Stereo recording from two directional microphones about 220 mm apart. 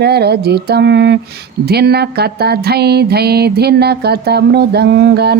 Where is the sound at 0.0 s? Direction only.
50° right (ahead or behind).